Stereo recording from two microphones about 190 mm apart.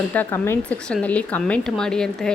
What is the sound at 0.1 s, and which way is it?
A woman's voice, 10° left (ahead or behind).